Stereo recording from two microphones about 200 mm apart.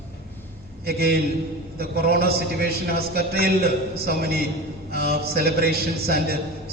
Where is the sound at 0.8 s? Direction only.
50° right (ahead or behind).